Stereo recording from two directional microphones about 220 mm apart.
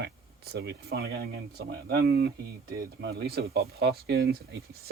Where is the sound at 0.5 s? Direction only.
45° right (ahead or behind).